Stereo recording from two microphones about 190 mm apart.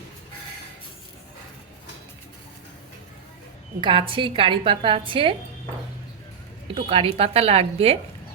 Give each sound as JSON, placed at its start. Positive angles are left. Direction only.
{"t": 3.8, "sound": "a woman's voice", "side_deg": -25}
{"t": 6.7, "sound": "a woman's voice", "side_deg": -30}